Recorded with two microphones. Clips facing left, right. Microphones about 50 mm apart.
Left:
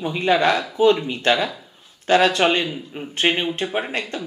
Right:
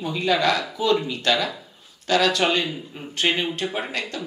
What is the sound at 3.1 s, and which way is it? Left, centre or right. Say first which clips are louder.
Speech: left 2 dB; left.